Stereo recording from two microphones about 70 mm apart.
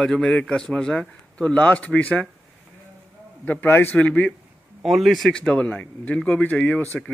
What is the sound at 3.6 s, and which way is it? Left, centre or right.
Speech, left.